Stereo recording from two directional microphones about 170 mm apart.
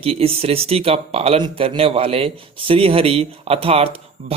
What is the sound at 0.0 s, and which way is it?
Speech, 35° right (ahead or behind).